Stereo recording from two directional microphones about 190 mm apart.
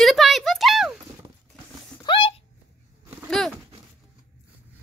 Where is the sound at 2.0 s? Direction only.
25° left (ahead or behind).